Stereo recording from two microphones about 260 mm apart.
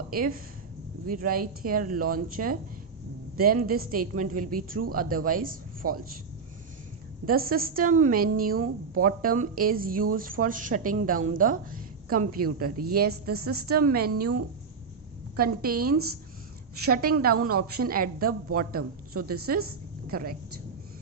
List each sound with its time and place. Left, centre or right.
0.1 s a woman's voice: right
7.3 s a woman's voice: right
15.4 s a woman's voice: right